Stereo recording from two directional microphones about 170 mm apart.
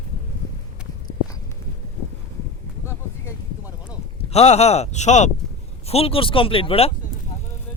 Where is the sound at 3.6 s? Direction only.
10° right (ahead or behind).